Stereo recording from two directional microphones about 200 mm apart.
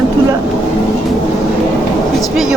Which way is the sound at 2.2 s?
Centre (ahead or behind).